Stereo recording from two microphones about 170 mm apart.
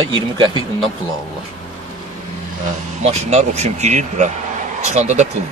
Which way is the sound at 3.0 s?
40° right (ahead or behind).